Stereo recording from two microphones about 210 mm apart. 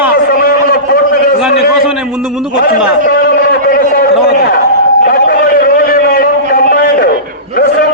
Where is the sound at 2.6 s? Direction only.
45° left (ahead or behind).